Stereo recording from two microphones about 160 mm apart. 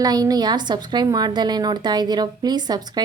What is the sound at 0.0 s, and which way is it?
Speech, 25° right (ahead or behind).